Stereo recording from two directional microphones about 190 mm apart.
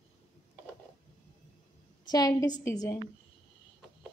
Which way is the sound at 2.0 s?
20° left (ahead or behind).